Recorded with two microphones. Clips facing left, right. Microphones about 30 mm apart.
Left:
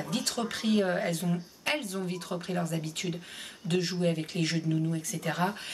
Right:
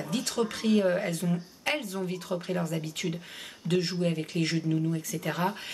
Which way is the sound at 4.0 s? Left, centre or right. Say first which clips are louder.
Even; centre.